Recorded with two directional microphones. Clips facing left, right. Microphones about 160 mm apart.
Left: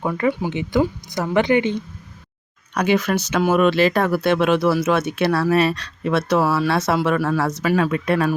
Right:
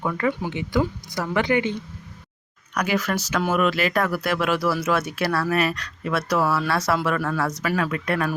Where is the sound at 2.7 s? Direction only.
25° left (ahead or behind).